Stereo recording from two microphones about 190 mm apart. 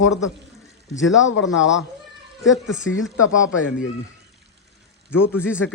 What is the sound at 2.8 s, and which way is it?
Speech, 90° left.